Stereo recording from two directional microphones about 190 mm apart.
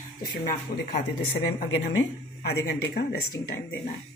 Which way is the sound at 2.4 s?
60° left (ahead or behind).